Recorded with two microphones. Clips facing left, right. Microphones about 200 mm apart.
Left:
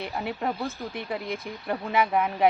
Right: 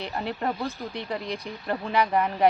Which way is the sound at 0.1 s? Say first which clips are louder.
Right 2 dB; 5° left (ahead or behind).